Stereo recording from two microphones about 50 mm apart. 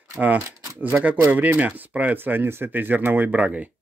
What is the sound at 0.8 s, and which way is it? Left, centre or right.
Speech, right.